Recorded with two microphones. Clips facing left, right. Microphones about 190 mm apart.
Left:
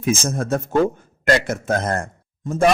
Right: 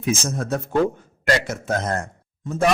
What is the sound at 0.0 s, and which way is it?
A man's voice, 50° left (ahead or behind).